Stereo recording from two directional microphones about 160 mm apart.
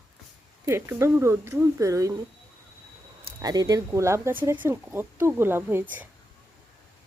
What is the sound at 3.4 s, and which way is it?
Speech, 25° right (ahead or behind).